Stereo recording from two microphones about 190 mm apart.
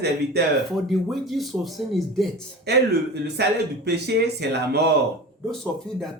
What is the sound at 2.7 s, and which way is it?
Speech, 60° right (ahead or behind).